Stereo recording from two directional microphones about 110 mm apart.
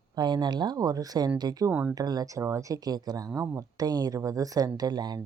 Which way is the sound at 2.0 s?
35° right (ahead or behind).